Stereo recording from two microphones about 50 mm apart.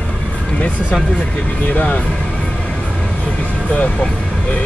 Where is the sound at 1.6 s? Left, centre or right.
Left.